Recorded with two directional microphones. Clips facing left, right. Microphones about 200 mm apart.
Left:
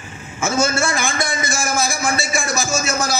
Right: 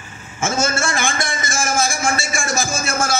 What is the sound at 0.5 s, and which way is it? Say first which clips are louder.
A man's voice: left 2 dB; 50° right (ahead or behind).